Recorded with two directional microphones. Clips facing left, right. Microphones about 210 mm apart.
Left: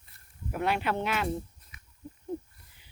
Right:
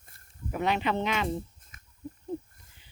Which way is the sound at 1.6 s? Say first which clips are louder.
Left 1 dB; 45° right (ahead or behind).